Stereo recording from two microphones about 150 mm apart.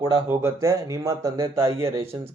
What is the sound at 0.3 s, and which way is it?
Speech, 20° right (ahead or behind).